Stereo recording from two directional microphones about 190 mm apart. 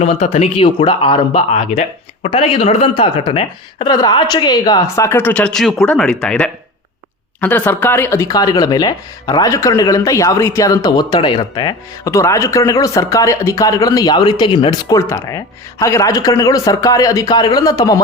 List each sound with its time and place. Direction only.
0.0 s speech: 35° left (ahead or behind)